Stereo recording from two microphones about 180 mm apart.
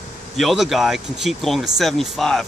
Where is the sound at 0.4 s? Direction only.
Centre (ahead or behind).